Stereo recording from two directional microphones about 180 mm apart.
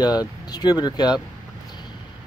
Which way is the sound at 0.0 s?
20° left (ahead or behind).